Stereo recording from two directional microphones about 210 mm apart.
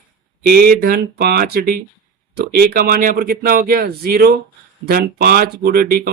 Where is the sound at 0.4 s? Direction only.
45° right (ahead or behind).